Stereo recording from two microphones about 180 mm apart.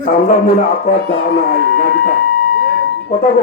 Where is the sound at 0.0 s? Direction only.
50° left (ahead or behind).